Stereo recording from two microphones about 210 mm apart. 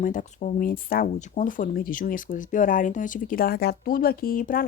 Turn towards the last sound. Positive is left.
turn(degrees=45)  # may be behind; listen again after turning